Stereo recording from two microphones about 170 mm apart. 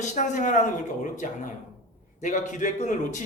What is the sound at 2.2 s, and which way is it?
Speech, 45° left (ahead or behind).